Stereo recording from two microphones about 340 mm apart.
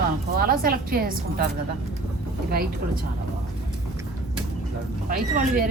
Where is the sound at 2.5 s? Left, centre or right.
Right.